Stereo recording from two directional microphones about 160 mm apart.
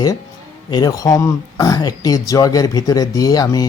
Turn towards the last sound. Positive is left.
turn(degrees=25)  # may be behind; listen again after turning